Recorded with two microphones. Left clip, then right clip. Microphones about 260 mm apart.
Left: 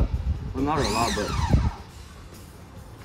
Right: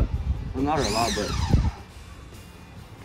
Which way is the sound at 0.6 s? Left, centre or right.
Centre.